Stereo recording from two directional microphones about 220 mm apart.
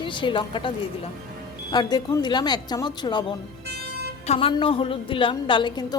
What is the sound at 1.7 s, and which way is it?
A woman's voice, 20° left (ahead or behind).